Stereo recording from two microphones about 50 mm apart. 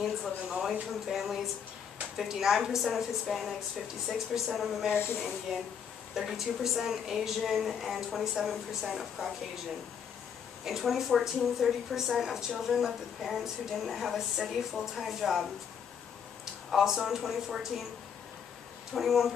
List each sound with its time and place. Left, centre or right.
0.5 s a woman's voice: centre
4.9 s speech: left
6.1 s a woman's voice: centre
10.6 s a woman's voice: centre
16.7 s a woman's voice: centre
18.9 s a woman's voice: centre